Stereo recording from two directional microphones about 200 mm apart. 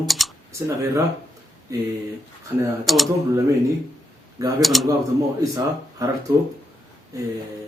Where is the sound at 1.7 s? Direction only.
15° right (ahead or behind).